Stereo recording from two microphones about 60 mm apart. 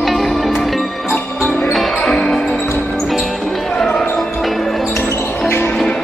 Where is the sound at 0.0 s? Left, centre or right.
Centre.